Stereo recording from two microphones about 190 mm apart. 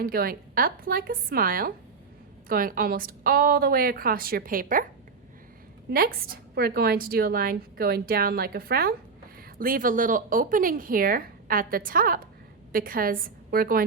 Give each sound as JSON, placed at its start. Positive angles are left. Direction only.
{"t": 0.0, "sound": "a woman's voice", "side_deg": -50}
{"t": 5.9, "sound": "a woman's voice", "side_deg": -50}